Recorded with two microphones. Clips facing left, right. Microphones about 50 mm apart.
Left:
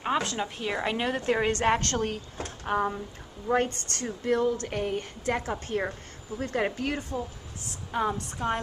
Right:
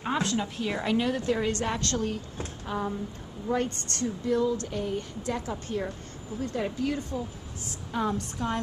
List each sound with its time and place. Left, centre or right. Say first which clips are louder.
0.4 s a woman's voice: even; centre
0.9 s a woman's voice: right 2 dB; left
6.6 s a woman's voice: even; left
7.9 s a woman's voice: left 1 dB; centre